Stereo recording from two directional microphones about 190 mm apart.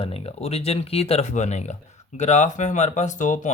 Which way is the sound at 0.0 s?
30° left (ahead or behind).